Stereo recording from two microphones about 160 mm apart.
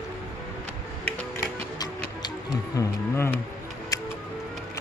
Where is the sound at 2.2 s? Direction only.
20° left (ahead or behind).